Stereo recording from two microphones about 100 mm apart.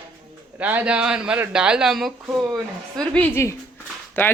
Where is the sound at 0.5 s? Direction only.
15° right (ahead or behind).